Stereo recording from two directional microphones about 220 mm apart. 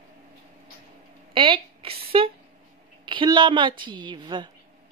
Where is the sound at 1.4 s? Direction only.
25° right (ahead or behind).